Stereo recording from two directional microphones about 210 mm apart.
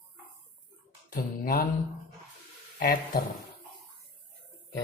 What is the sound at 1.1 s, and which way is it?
Speech, 45° left (ahead or behind).